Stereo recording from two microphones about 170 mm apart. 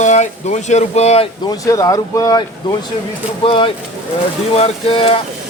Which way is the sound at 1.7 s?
20° left (ahead or behind).